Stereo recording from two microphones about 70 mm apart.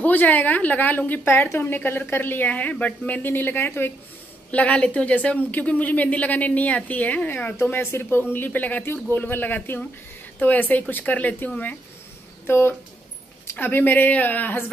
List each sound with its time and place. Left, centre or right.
0.0 s a woman's voice: left
4.5 s a woman's voice: centre
12.4 s a woman's voice: left